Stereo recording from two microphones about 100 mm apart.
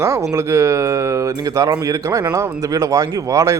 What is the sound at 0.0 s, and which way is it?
Speech, 30° right (ahead or behind).